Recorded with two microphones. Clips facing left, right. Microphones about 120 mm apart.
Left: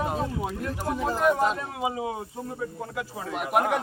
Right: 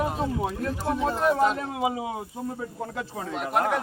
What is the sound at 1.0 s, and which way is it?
Speech, centre (ahead or behind).